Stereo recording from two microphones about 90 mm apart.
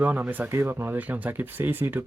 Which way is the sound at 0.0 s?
20° right (ahead or behind).